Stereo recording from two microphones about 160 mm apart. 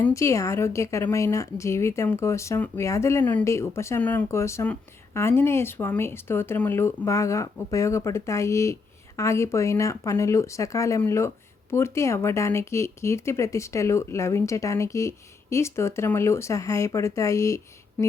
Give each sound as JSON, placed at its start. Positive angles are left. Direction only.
{"t": 0.0, "sound": "a woman's voice", "side_deg": 20}